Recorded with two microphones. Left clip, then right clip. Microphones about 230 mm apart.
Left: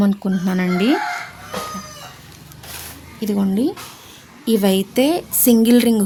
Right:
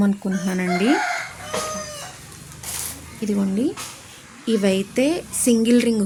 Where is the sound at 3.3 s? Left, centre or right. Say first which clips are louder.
Left 3 dB; left.